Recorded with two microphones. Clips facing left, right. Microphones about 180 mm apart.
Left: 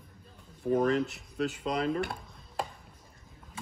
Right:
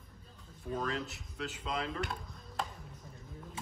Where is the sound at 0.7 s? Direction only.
55° left (ahead or behind).